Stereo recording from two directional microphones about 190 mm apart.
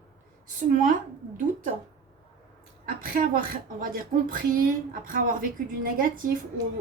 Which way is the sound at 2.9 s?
45° right (ahead or behind).